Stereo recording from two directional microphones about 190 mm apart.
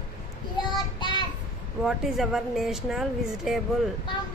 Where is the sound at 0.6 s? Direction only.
25° left (ahead or behind).